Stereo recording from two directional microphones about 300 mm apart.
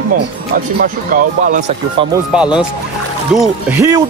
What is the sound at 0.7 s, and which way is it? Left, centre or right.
Speech, right.